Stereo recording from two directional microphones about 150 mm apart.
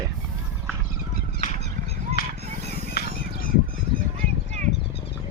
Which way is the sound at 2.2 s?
90° left.